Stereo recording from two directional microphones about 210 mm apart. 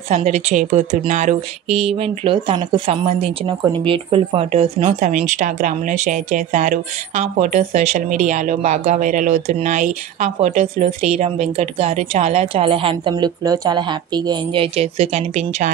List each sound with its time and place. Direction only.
0.1 s speech: 35° right (ahead or behind)